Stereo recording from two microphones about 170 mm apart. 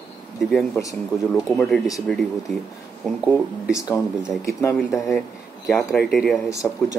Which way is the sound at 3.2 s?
5° right (ahead or behind).